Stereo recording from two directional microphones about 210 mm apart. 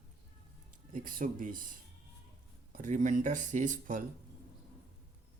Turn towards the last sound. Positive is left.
turn(degrees=-40)  # may be behind; listen again after turning